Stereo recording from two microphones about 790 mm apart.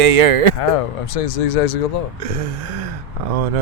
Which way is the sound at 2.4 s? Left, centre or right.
Right.